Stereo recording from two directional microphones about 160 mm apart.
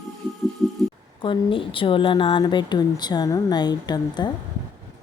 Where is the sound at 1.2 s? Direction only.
30° left (ahead or behind).